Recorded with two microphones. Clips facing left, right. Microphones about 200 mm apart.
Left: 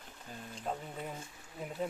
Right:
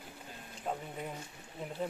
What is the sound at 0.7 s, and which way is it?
Speech, 5° right (ahead or behind).